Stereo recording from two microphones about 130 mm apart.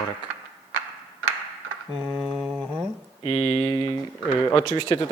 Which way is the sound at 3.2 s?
40° left (ahead or behind).